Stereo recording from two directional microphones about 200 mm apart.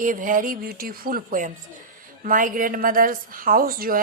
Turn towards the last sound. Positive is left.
turn(degrees=-45)  # may be behind; listen again after turning